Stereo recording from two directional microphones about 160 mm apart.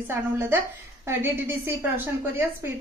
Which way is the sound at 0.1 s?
15° right (ahead or behind).